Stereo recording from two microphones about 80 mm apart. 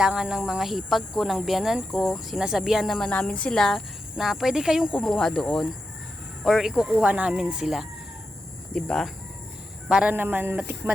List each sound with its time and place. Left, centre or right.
0.0 s speech: centre
3.1 s speech: centre
5.0 s speech: centre
8.7 s speech: centre
10.1 s speech: right
10.6 s speech: centre